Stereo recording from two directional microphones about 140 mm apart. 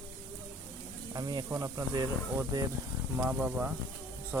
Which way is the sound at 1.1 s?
25° right (ahead or behind).